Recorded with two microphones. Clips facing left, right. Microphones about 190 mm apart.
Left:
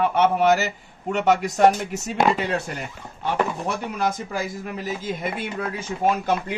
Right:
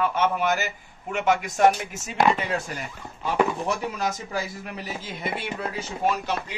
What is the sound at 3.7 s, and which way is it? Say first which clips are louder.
Speech: left 2 dB; 55° left (ahead or behind).